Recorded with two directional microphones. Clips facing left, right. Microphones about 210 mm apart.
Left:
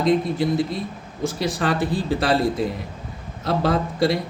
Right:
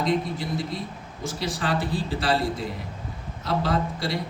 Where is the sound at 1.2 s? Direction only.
55° left (ahead or behind).